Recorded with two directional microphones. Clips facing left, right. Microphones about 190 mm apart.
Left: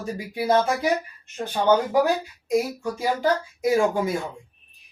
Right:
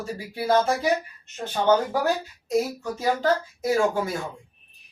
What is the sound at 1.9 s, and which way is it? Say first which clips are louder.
Speech: left 4 dB; 15° left (ahead or behind).